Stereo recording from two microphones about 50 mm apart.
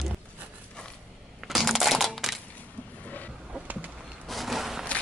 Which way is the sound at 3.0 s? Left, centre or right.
Left.